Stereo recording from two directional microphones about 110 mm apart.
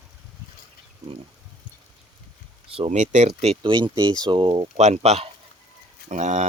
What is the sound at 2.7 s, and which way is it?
Speech, 65° right (ahead or behind).